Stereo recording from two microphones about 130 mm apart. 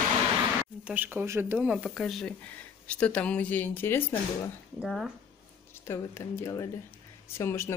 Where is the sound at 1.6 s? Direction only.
5° right (ahead or behind); by 4.5 s 15° left (ahead or behind).